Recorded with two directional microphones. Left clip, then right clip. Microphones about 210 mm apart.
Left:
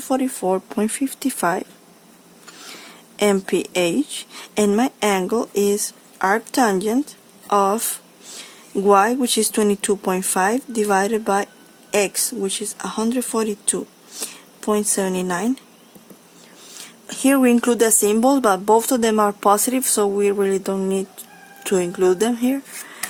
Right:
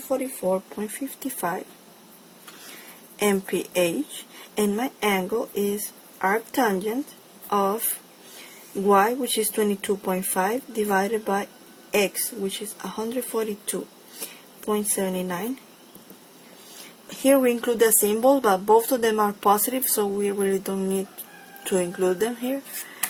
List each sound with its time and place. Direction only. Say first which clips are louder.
0.5 s speech: left 6 dB; 40° left (ahead or behind)
3.2 s speech: left 5 dB; 30° left (ahead or behind)
8.9 s speech: left 4 dB; 30° left (ahead or behind)
17.2 s speech: left 3 dB; 35° left (ahead or behind)